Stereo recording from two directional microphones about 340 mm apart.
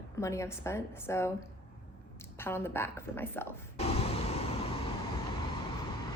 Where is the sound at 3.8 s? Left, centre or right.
Centre.